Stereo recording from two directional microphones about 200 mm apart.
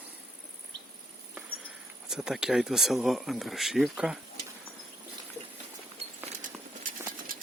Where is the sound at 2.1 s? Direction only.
5° right (ahead or behind).